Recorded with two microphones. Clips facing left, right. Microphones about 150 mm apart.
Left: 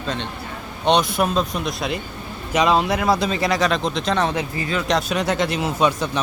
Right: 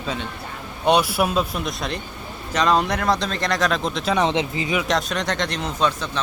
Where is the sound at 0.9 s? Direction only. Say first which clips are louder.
Even; 10° right (ahead or behind).